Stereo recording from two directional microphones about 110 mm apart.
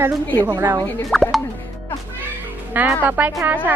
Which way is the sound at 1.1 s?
Centre (ahead or behind).